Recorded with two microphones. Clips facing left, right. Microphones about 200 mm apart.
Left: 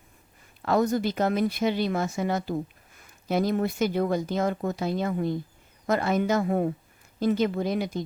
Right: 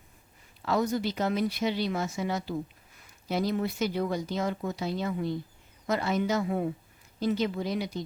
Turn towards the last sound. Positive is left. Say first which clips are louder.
# left 4 dB
turn(degrees=50)  # may be behind; listen again after turning